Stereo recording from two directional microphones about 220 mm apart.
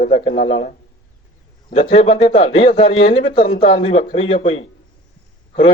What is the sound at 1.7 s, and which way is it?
A man's voice, 25° left (ahead or behind).